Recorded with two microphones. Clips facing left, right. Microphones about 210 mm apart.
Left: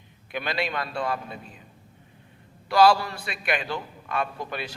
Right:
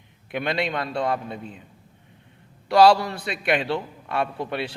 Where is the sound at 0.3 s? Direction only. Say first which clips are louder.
Right 3 dB; 20° right (ahead or behind).